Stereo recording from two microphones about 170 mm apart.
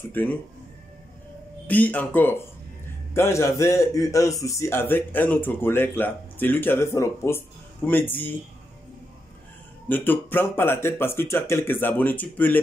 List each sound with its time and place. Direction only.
0.1 s speech: 10° left (ahead or behind)
1.7 s speech: 10° left (ahead or behind)
9.8 s speech: 10° left (ahead or behind)